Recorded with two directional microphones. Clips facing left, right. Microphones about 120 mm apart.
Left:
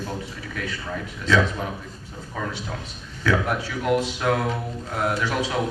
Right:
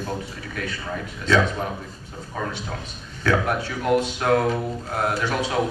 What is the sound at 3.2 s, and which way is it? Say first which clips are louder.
A man's voice: right 1 dB; 50° right (ahead or behind).